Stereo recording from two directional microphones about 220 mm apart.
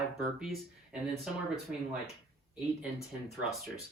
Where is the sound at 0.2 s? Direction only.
Centre (ahead or behind).